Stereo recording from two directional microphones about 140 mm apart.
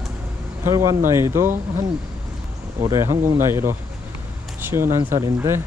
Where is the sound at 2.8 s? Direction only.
20° right (ahead or behind).